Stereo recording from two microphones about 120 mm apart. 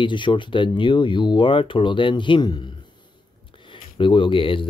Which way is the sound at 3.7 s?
45° left (ahead or behind).